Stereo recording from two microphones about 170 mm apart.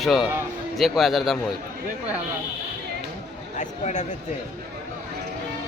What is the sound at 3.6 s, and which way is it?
Speech, 45° left (ahead or behind).